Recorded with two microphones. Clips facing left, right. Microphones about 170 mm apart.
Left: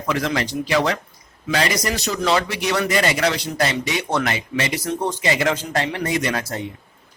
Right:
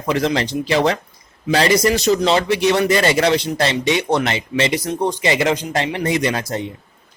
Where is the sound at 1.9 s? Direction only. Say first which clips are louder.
Right 5 dB; 20° right (ahead or behind).